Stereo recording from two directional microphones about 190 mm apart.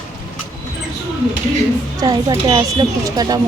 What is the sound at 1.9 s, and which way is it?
Speech, 20° right (ahead or behind).